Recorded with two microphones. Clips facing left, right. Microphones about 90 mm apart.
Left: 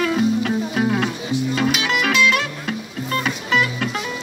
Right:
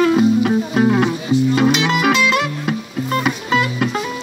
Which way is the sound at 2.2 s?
15° right (ahead or behind).